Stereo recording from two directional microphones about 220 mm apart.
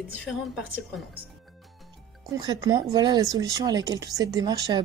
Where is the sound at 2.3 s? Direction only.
15° right (ahead or behind).